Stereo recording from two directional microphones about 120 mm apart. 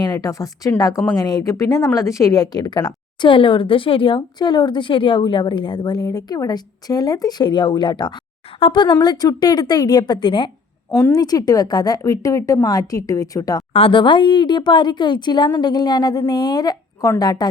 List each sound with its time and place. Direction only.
0.0 s a woman's voice: 30° left (ahead or behind)
11.1 s speech: 30° left (ahead or behind)
13.7 s speech: 45° left (ahead or behind)